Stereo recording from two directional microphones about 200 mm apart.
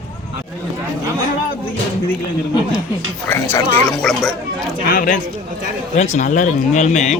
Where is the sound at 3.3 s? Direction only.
10° left (ahead or behind).